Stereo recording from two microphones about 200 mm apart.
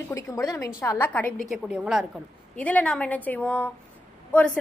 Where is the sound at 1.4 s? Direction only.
5° right (ahead or behind).